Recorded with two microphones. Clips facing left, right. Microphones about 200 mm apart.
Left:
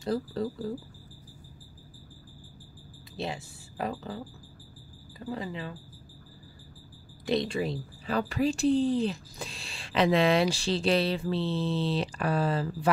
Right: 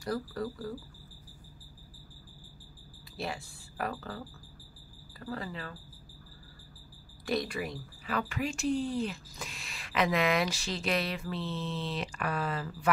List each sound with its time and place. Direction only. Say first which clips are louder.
0.0 s speech: left 4 dB; 25° left (ahead or behind)
3.2 s speech: left 3 dB; 20° left (ahead or behind)
5.2 s speech: left 4 dB; 20° left (ahead or behind)
7.2 s speech: left 5 dB; 25° left (ahead or behind)